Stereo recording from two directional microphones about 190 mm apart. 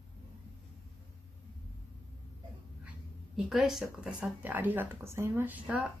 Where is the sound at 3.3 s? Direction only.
Centre (ahead or behind).